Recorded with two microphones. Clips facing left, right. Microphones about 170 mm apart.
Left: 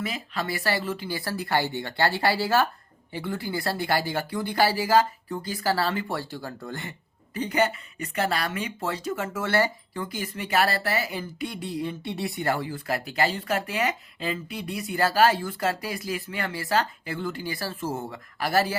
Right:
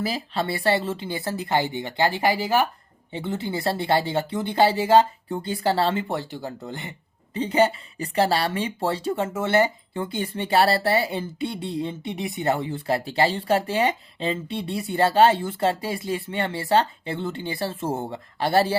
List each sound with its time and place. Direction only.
0.0 s speech: 30° right (ahead or behind)